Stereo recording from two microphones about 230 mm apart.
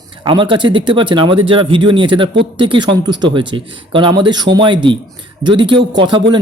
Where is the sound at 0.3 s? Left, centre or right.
Right.